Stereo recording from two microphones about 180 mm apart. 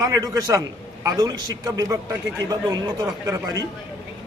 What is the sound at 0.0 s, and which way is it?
A man's voice, 20° right (ahead or behind).